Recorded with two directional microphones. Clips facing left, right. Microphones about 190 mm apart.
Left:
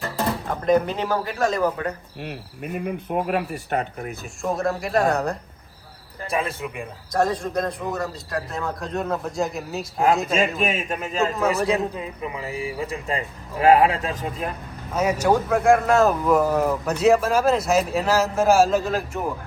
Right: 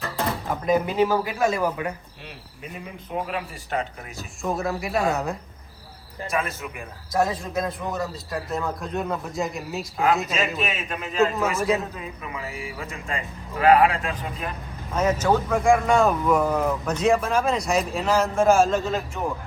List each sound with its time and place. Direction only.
0.0 s speech: centre (ahead or behind)
2.2 s speech: 60° left (ahead or behind)
4.4 s speech: centre (ahead or behind)
6.2 s a man's voice: 30° left (ahead or behind)
7.1 s speech: 5° right (ahead or behind)
10.7 s a man's voice: 45° left (ahead or behind)
14.9 s speech: 10° left (ahead or behind)